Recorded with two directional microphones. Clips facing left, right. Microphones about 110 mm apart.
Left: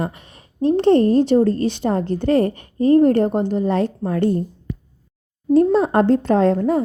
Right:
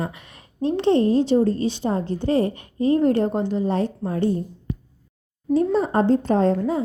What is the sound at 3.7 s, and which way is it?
Speech, 75° left (ahead or behind).